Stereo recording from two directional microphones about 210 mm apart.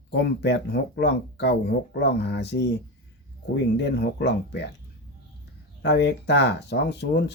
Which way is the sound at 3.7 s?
55° left (ahead or behind).